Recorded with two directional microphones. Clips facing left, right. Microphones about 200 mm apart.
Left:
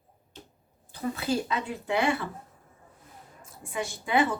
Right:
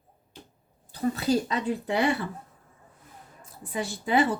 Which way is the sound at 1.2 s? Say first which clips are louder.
Right 2 dB; 35° right (ahead or behind).